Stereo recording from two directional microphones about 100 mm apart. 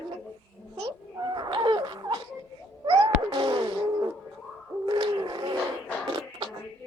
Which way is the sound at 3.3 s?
45° right (ahead or behind).